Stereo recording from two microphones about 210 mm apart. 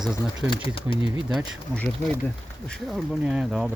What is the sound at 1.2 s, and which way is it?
Speech, 5° left (ahead or behind).